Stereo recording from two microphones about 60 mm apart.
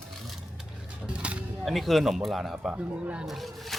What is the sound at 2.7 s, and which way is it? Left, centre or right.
Speech, right.